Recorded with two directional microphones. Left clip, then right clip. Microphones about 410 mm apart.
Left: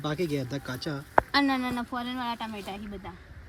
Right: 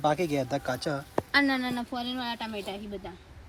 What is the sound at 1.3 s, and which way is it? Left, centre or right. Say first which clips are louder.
Speech: even; centre.